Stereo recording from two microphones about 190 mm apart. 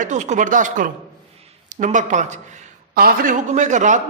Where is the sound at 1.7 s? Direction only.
40° right (ahead or behind).